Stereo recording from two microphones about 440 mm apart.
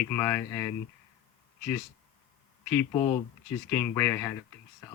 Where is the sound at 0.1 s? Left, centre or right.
Centre.